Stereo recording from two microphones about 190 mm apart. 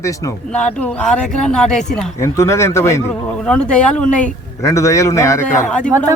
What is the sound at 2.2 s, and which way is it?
Speech, 15° left (ahead or behind).